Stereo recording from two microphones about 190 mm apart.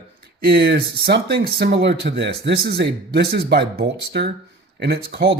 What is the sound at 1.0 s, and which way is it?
Speech, 55° right (ahead or behind).